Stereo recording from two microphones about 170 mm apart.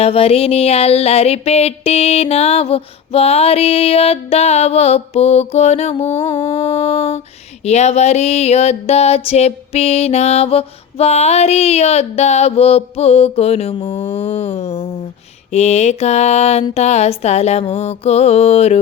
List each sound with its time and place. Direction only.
0.0 s music: 35° left (ahead or behind)